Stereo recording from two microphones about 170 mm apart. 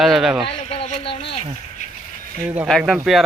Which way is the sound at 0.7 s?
35° left (ahead or behind).